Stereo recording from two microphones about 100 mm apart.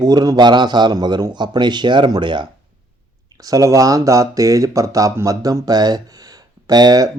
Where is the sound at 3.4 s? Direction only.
35° right (ahead or behind).